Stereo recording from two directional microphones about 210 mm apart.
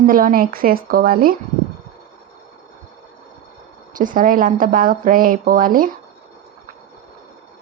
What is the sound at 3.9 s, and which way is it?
Speech, 40° right (ahead or behind).